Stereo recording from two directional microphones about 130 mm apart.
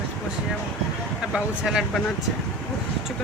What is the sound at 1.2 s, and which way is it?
Speech, 5° right (ahead or behind).